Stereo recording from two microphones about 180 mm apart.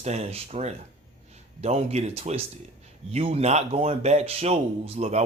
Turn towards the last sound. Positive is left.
turn(degrees=-35)  # may be behind; listen again after turning